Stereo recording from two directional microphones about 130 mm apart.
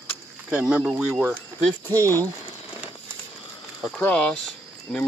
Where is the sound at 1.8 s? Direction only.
25° right (ahead or behind).